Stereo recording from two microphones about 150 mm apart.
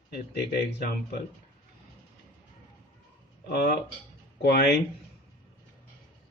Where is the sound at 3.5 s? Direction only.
90° left.